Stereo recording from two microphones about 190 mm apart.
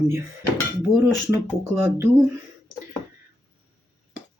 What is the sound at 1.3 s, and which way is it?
Speech, 15° right (ahead or behind).